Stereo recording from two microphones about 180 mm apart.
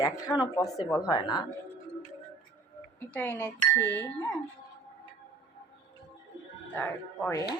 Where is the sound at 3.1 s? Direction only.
10° left (ahead or behind).